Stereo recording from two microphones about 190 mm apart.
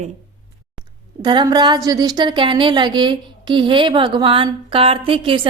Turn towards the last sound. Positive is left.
turn(degrees=-30)  # may be behind; listen again after turning